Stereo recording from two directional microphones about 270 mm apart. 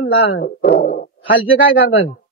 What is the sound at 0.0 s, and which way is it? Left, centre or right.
Speech, left.